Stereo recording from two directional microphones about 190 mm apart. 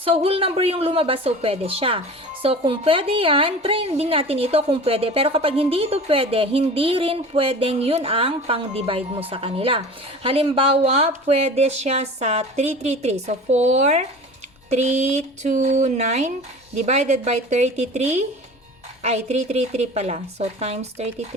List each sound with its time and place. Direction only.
0.0 s a woman's voice: 30° right (ahead or behind)